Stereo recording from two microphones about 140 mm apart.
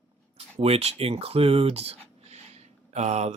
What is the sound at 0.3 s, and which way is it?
Speech, 45° right (ahead or behind).